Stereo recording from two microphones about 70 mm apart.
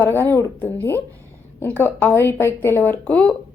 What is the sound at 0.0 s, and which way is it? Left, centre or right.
Speech, left.